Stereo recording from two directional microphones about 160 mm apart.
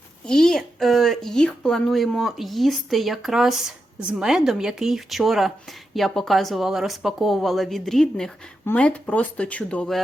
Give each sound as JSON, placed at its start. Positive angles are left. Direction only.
{"t": 0.3, "sound": "speech", "side_deg": 5}